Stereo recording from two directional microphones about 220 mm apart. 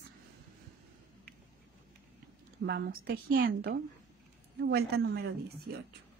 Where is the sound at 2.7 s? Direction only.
45° right (ahead or behind).